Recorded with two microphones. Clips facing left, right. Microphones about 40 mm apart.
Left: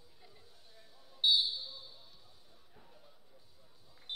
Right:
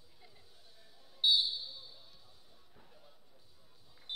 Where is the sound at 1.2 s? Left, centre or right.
Centre.